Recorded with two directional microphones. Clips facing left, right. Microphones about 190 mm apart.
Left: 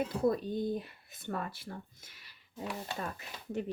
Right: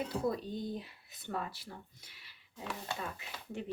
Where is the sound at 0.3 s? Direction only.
50° left (ahead or behind).